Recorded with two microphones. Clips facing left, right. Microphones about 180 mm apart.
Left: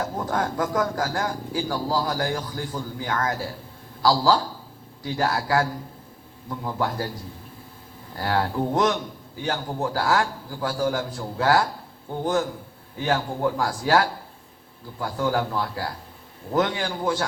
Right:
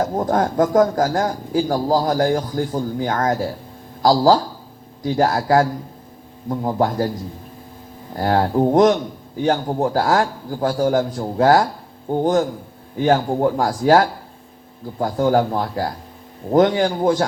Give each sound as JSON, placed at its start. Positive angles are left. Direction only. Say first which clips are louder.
{"t": 0.0, "sound": "speech", "louder": "right 7 dB", "side_deg": -35}
{"t": 8.1, "sound": "speech", "louder": "right 7 dB", "side_deg": -35}